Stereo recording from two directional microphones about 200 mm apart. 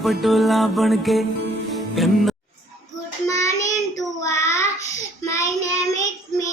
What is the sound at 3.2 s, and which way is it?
Child singing, 15° left (ahead or behind).